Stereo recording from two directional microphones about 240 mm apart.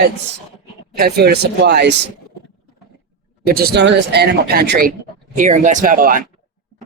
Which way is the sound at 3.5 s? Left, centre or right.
Right.